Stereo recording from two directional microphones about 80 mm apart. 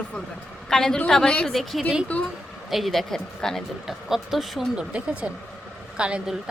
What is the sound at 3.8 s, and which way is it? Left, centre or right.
Speech, centre.